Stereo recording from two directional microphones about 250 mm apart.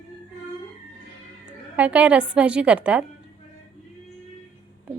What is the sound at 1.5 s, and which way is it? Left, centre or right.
A woman's voice, centre.